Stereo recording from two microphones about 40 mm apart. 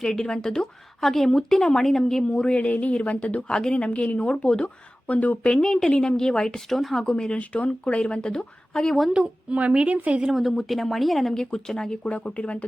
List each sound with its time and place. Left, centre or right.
0.0 s a woman's voice: centre
1.0 s a woman's voice: centre
2.2 s speech: left
2.6 s a woman's voice: left
3.5 s a woman's voice: left
5.4 s speech: left
6.7 s speech: centre
7.0 s speech: left
7.3 s a woman's voice: left
7.9 s speech: left
9.1 s speech: right
10.5 s speech: centre
11.3 s a woman's voice: centre
12.0 s a woman's voice: left